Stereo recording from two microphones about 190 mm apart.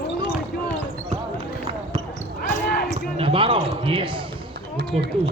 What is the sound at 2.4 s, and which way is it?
Basketball bounce, 55° left (ahead or behind).